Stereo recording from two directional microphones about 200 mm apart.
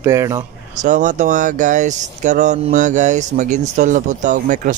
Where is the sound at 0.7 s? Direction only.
40° right (ahead or behind).